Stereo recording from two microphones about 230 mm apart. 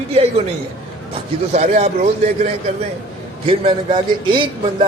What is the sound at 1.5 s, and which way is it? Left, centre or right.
A man's voice, right.